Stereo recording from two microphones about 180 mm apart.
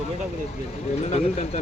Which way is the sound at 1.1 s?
35° left (ahead or behind).